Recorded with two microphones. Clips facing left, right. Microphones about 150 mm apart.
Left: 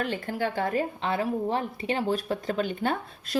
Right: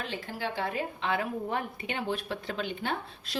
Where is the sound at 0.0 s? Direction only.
55° left (ahead or behind).